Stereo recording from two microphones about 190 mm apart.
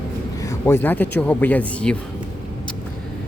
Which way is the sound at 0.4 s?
15° left (ahead or behind).